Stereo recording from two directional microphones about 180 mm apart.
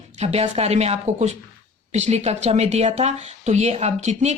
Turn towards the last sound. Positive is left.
turn(degrees=-40)  # may be behind; listen again after turning